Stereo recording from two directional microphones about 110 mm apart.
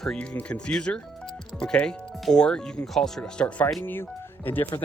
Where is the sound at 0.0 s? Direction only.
10° left (ahead or behind).